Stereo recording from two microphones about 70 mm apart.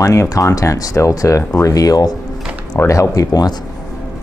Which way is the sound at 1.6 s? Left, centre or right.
Left.